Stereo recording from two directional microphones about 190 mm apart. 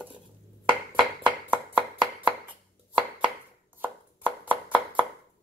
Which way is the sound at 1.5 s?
10° right (ahead or behind).